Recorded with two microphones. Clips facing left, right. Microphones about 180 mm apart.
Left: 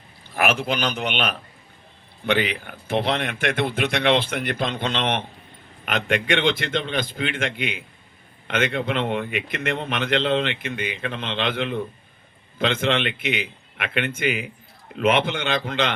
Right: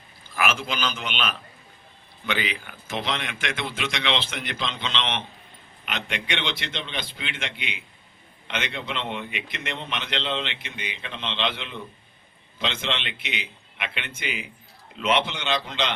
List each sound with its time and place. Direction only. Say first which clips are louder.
0.3 s a man's voice: left 4 dB; 60° left (ahead or behind)